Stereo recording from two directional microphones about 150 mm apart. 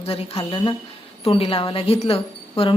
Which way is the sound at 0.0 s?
40° left (ahead or behind).